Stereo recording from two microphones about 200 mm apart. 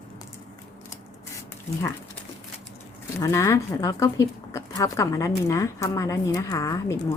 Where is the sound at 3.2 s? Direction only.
15° left (ahead or behind).